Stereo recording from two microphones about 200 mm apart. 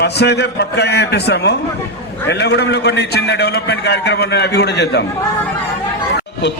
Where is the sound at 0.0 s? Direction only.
55° left (ahead or behind).